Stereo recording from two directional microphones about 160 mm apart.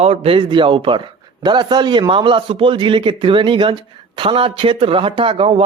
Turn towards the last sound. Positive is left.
turn(degrees=-35)  # may be behind; listen again after turning